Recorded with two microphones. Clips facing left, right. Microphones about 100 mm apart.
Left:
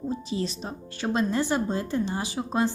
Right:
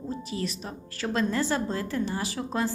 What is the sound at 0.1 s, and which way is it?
Speech, 20° left (ahead or behind).